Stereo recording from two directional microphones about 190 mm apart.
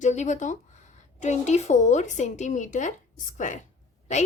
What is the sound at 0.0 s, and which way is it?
Speech, 40° left (ahead or behind).